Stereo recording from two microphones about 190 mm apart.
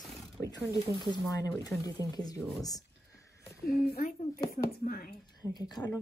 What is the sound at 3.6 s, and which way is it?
Speech, 50° left (ahead or behind).